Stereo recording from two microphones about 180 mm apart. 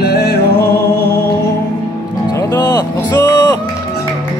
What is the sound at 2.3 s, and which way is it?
Vehicle, 20° left (ahead or behind).